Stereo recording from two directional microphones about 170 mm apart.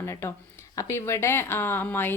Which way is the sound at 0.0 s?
15° left (ahead or behind).